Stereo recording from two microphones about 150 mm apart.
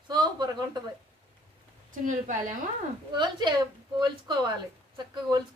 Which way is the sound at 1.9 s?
55° right (ahead or behind).